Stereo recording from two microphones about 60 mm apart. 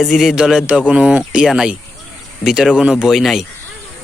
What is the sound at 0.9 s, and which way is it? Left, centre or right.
Speech, centre.